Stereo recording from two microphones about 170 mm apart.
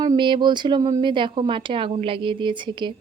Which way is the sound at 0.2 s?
30° right (ahead or behind).